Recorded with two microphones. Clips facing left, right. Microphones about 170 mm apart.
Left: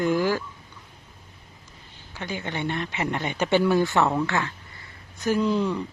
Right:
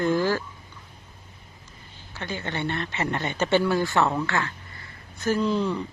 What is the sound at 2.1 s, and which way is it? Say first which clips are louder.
Speech: even; 15° left (ahead or behind).